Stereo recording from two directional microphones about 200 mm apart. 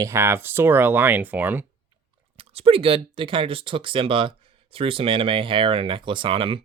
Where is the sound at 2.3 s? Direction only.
30° right (ahead or behind).